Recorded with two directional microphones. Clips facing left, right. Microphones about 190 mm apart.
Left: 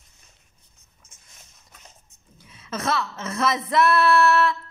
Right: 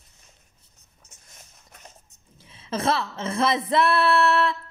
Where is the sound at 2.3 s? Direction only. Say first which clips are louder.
Right 3 dB; 30° right (ahead or behind).